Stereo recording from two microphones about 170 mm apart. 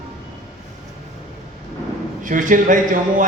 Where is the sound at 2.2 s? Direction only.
50° right (ahead or behind).